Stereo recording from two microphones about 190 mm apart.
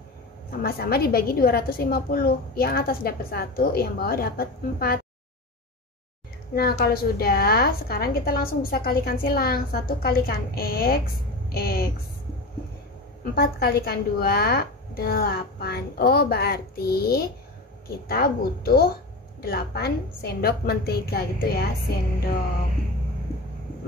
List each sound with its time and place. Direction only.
0.5 s a woman's voice: 55° left (ahead or behind)
6.5 s a woman's voice: 55° left (ahead or behind)
13.2 s a woman's voice: 55° left (ahead or behind)